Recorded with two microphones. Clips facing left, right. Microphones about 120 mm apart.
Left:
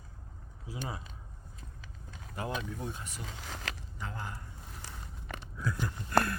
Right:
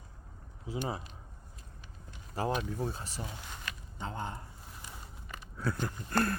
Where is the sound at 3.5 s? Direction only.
90° left.